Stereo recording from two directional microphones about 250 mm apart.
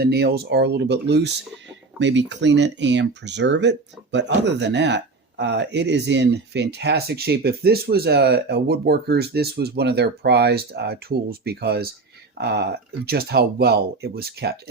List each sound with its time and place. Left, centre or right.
0.0 s speech: right